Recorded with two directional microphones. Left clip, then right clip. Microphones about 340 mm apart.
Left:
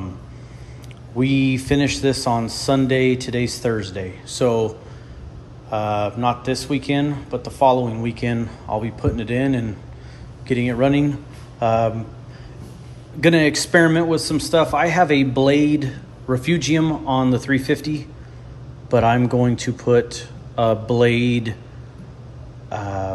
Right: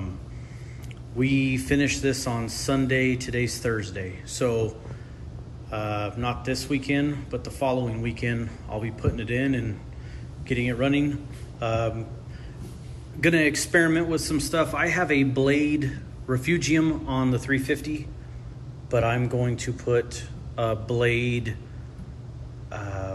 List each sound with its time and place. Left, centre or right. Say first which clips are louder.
1.2 s speech: left 5 dB; centre
13.2 s speech: left 6 dB; centre
22.7 s a sound: left 9 dB; centre